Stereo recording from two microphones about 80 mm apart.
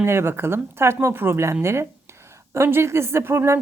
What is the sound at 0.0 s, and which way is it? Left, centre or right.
A woman's voice, right.